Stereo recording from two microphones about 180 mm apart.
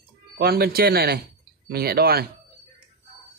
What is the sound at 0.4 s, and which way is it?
Speech, 60° right (ahead or behind).